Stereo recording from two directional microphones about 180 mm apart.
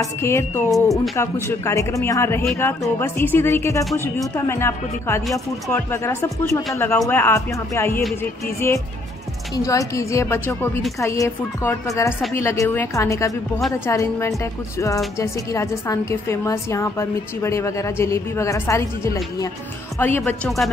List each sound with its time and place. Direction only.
0.0 s speech: 15° left (ahead or behind)
20.0 s speech: 10° left (ahead or behind)
20.4 s speech: centre (ahead or behind)